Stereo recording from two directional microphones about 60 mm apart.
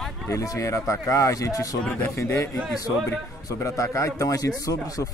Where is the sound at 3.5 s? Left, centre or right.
Left.